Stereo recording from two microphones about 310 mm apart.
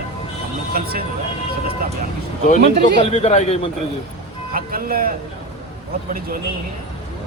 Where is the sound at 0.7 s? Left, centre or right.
Right.